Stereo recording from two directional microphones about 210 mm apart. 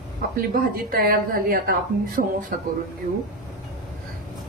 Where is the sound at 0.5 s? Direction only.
45° right (ahead or behind).